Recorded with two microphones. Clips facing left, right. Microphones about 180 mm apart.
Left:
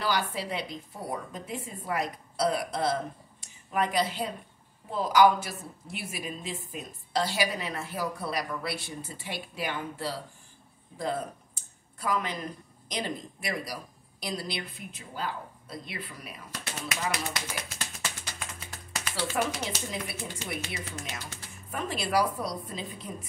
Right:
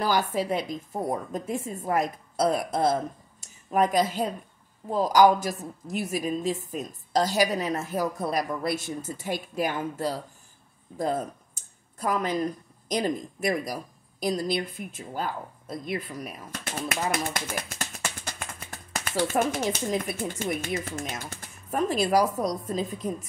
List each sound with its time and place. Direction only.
0.0 s a woman's voice: 45° right (ahead or behind)